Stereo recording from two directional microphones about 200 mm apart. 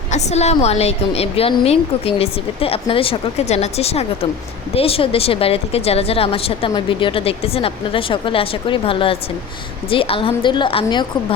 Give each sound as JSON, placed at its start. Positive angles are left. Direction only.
{"t": 0.1, "sound": "a woman's voice", "side_deg": 35}